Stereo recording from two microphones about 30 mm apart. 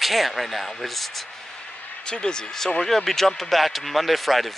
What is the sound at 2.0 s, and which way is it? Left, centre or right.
Speech, left.